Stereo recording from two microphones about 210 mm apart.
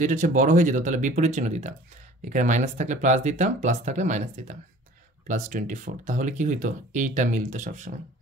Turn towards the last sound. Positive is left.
turn(degrees=-35)  # may be behind; listen again after turning